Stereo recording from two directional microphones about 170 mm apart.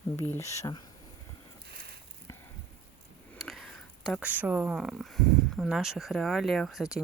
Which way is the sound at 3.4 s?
Centre (ahead or behind).